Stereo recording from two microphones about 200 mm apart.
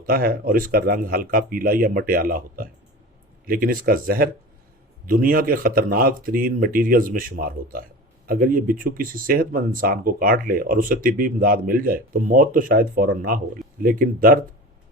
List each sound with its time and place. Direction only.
0.0 s speech: 45° right (ahead or behind)